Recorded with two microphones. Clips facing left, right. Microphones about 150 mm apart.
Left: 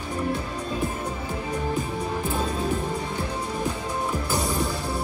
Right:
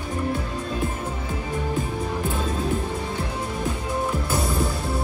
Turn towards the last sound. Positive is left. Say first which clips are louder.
# right 1 dB
turn(degrees=0)  # may be behind; listen again after turning